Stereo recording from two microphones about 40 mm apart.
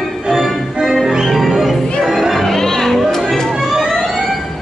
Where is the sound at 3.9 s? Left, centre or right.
Centre.